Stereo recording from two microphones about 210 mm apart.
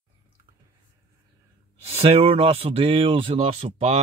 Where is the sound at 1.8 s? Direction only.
30° right (ahead or behind).